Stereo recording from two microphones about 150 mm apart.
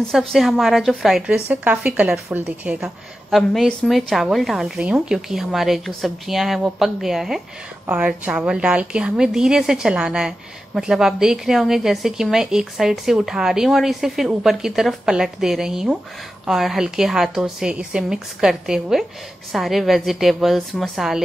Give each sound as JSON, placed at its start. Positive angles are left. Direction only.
{"t": 0.1, "sound": "a woman's voice", "side_deg": 0}